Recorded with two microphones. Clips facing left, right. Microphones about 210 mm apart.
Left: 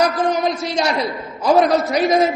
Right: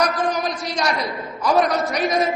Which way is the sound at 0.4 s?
25° left (ahead or behind).